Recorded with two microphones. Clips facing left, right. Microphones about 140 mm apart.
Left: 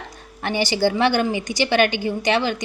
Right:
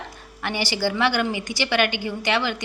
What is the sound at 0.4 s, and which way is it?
A woman's voice, 20° left (ahead or behind).